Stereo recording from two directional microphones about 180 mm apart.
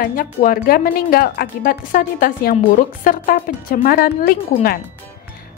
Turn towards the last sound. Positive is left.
turn(degrees=55)  # may be behind; listen again after turning